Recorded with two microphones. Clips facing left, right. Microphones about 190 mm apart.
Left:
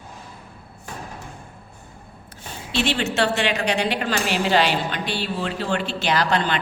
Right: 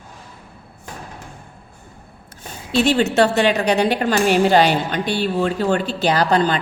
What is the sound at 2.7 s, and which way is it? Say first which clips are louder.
A woman's voice: right 7 dB; 40° right (ahead or behind).